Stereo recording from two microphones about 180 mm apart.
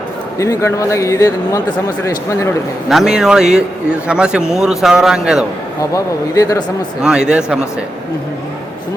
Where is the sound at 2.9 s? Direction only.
Centre (ahead or behind).